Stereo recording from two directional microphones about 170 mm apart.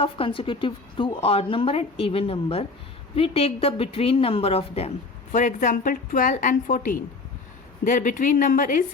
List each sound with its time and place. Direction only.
0.0 s a woman's voice: 30° left (ahead or behind)
5.3 s a woman's voice: 50° left (ahead or behind)